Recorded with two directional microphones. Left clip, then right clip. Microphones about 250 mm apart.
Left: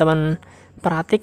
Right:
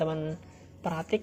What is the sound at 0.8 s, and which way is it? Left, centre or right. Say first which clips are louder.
Speech: left 11 dB; left.